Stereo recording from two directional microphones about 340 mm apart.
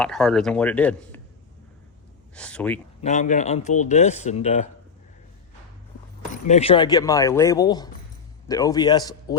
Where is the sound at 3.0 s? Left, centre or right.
Left.